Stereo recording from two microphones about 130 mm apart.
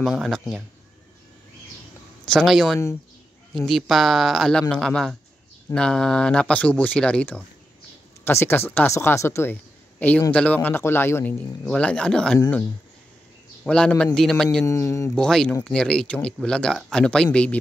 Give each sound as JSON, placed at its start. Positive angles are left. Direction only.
{"t": 0.0, "sound": "speech", "side_deg": 0}
{"t": 2.2, "sound": "speech", "side_deg": 5}
{"t": 11.6, "sound": "speech", "side_deg": 5}
{"t": 13.7, "sound": "speech", "side_deg": 5}
{"t": 14.7, "sound": "speech", "side_deg": 20}
{"t": 15.1, "sound": "speech", "side_deg": 5}